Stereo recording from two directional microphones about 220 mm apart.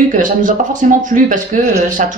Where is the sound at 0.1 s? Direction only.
35° right (ahead or behind).